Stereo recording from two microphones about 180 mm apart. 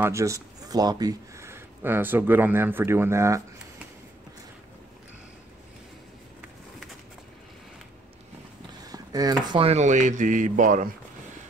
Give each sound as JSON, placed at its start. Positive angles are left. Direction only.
{"t": 0.0, "sound": "speech", "side_deg": -15}
{"t": 8.8, "sound": "speech", "side_deg": -20}